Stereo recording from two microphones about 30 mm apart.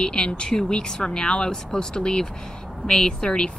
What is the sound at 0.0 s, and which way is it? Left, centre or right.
A woman's voice, left.